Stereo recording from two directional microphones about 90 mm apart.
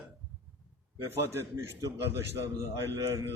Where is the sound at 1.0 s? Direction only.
30° right (ahead or behind).